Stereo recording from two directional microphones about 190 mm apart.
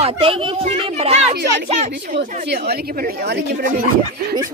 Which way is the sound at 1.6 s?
35° right (ahead or behind).